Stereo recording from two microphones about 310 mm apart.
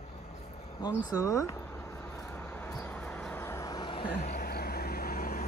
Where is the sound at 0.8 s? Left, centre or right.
Centre.